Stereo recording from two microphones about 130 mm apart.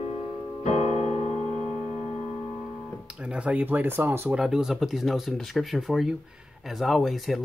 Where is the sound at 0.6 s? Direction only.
60° left (ahead or behind).